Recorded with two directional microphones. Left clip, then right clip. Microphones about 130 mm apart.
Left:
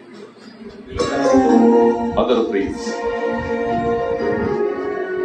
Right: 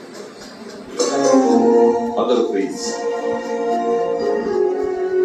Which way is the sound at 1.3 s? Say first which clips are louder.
Left 1 dB; 15° right (ahead or behind).